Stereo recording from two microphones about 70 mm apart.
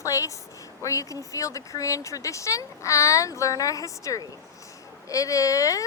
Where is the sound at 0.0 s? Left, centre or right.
Left.